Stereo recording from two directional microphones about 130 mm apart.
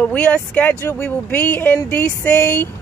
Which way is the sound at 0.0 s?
10° left (ahead or behind).